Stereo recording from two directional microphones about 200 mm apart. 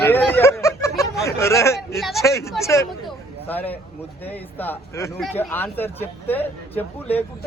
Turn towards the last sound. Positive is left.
turn(degrees=10)  # may be behind; listen again after turning